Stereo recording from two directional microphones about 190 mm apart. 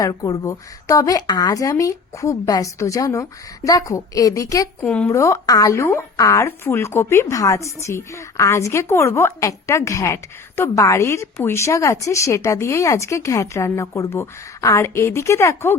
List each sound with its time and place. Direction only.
0.0 s speech: 20° left (ahead or behind)